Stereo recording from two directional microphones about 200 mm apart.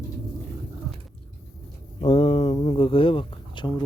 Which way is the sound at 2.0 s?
30° left (ahead or behind).